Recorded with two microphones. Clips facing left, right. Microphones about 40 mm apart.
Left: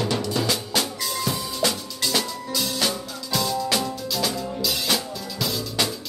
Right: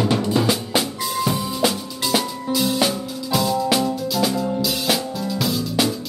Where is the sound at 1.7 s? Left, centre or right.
Centre.